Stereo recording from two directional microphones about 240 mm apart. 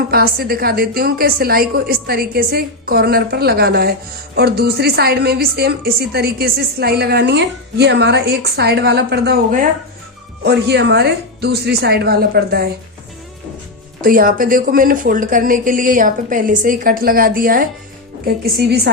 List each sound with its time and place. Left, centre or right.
0.1 s a woman's voice: right
14.0 s a woman's voice: right